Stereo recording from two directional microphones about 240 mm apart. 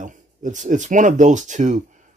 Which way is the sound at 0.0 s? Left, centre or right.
Right.